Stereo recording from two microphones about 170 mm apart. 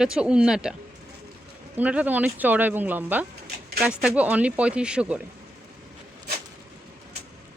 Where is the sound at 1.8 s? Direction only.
10° right (ahead or behind).